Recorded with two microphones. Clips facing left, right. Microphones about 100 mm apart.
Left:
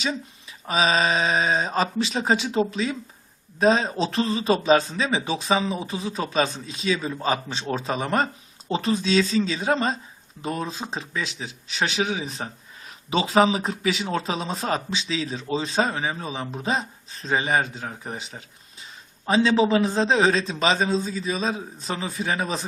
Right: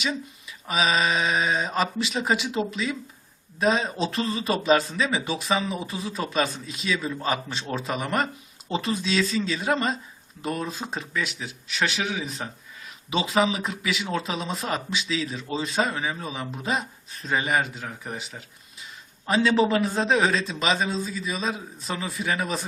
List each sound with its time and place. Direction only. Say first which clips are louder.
0.0 s speech: left 1 dB; 35° left (ahead or behind)
19.3 s speech: left 2 dB; 30° left (ahead or behind)